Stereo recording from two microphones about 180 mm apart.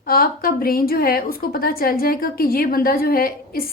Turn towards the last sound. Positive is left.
turn(degrees=55)  # may be behind; listen again after turning